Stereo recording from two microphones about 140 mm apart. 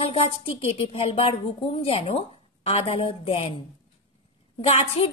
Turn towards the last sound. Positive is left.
turn(degrees=45)  # may be behind; listen again after turning